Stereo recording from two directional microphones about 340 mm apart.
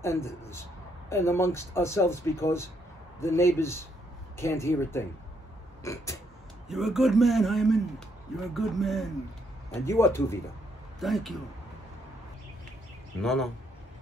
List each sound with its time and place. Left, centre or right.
0.0 s a man's voice: centre
13.2 s a man's voice: centre